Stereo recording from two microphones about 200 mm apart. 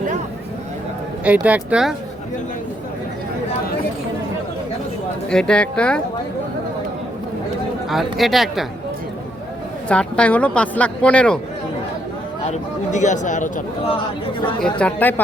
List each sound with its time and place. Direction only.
1.2 s speech: 10° right (ahead or behind)
5.3 s a woman's voice: 5° left (ahead or behind)
7.9 s a woman's voice: centre (ahead or behind)
9.9 s speech: 5° left (ahead or behind)
12.5 s speech: 35° left (ahead or behind)
13.9 s speech: 25° left (ahead or behind)
14.6 s speech: 5° left (ahead or behind)